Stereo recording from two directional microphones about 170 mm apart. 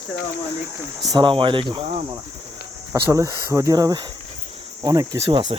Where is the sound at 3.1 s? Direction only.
20° right (ahead or behind).